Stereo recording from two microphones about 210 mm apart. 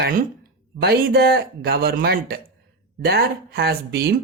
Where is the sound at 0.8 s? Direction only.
50° right (ahead or behind).